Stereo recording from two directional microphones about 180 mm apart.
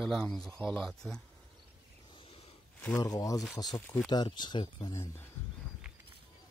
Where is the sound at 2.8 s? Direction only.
20° left (ahead or behind).